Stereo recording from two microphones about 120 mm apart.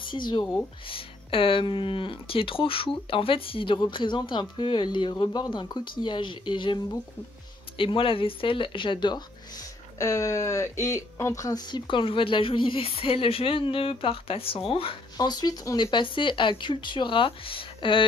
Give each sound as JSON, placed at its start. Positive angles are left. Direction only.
{"t": 0.0, "sound": "speech", "side_deg": 40}
{"t": 9.9, "sound": "speech", "side_deg": 25}
{"t": 15.1, "sound": "speech", "side_deg": 35}